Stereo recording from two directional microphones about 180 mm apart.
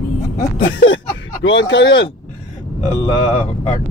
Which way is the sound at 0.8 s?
90° left.